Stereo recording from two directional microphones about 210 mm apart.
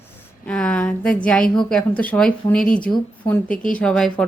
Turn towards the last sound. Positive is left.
turn(degrees=5)  # may be behind; listen again after turning